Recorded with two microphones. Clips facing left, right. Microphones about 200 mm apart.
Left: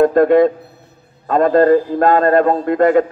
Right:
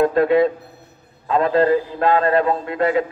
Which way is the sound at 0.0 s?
50° left (ahead or behind).